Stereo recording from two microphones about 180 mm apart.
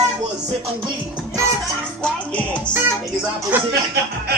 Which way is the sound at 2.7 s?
10° right (ahead or behind).